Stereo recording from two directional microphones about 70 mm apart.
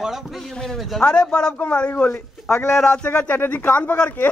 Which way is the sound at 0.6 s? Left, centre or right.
Centre.